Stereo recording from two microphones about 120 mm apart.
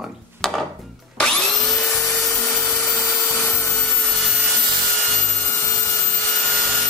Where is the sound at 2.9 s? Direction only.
20° left (ahead or behind).